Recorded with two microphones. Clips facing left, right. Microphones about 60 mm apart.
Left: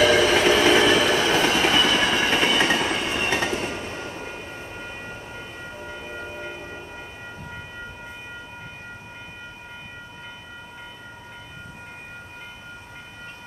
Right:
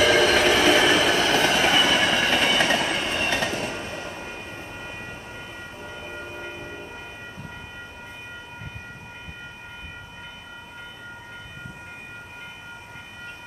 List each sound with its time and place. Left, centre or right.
0.0 s train: centre
1.2 s vehicle: centre
1.6 s train: centre
3.2 s train: centre